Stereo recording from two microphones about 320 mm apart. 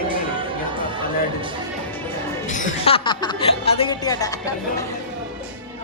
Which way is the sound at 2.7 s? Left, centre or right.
Centre.